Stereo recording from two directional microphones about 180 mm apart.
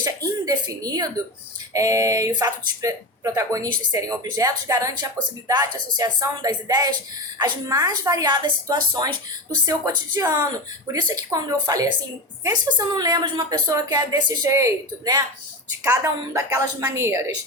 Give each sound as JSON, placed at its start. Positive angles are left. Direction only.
{"t": 0.0, "sound": "speech", "side_deg": -20}